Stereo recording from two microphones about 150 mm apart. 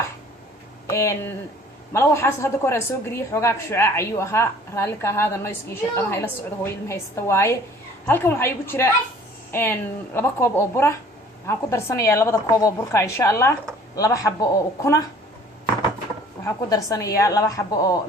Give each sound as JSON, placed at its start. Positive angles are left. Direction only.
{"t": 0.9, "sound": "a woman's voice", "side_deg": 20}
{"t": 16.4, "sound": "a woman's voice", "side_deg": 20}